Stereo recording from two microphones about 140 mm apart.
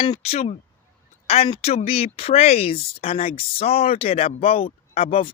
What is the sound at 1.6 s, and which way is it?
Speech, 45° left (ahead or behind).